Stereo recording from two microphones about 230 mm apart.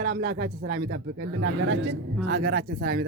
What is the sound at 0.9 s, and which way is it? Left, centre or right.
Speech, right.